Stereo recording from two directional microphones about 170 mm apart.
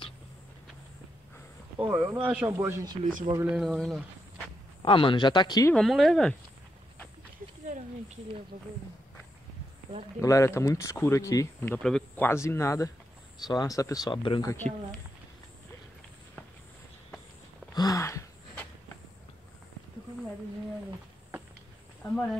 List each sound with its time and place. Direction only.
1.8 s speech: 15° right (ahead or behind)
3.3 s speech: 5° right (ahead or behind)
4.8 s speech: 30° left (ahead or behind)
5.7 s speech: centre (ahead or behind)
10.2 s speech: 20° left (ahead or behind)
11.8 s speech: 5° left (ahead or behind)
12.3 s speech: 15° left (ahead or behind)
14.5 s speech: 10° left (ahead or behind)
17.7 s a sound: 20° left (ahead or behind)
22.1 s speech: 5° left (ahead or behind)